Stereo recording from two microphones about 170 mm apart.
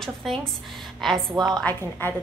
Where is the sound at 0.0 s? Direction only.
Centre (ahead or behind).